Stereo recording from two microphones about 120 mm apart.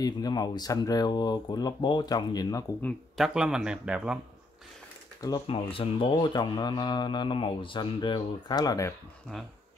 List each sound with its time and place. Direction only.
0.0 s speech: 35° left (ahead or behind)
3.2 s speech: 5° right (ahead or behind)
5.5 s speech: 50° left (ahead or behind); by 8.9 s 30° left (ahead or behind)